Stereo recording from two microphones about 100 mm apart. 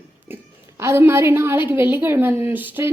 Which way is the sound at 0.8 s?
25° right (ahead or behind).